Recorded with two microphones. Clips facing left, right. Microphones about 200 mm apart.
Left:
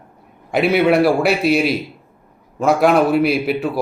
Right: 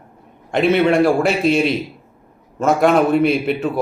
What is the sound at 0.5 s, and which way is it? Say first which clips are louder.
A man's voice: even; 5° left (ahead or behind).